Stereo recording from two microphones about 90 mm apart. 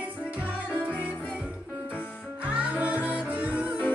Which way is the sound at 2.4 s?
15° right (ahead or behind).